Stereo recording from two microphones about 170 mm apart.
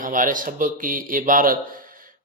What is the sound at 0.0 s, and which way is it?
A man's voice, 50° right (ahead or behind).